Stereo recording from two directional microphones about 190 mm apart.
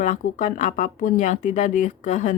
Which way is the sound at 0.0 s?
40° left (ahead or behind).